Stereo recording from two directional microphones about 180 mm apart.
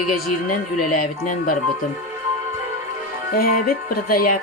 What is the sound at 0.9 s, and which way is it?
Speech, 50° left (ahead or behind).